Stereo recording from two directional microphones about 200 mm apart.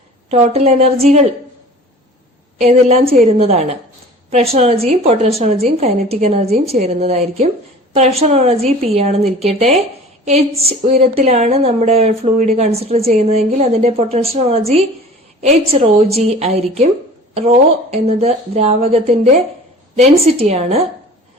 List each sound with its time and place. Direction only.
0.3 s a woman's voice: 30° right (ahead or behind)
2.6 s a woman's voice: 30° right (ahead or behind)